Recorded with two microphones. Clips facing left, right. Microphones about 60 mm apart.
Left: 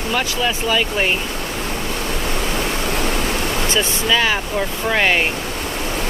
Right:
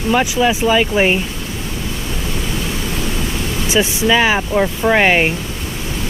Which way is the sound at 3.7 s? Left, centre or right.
Centre.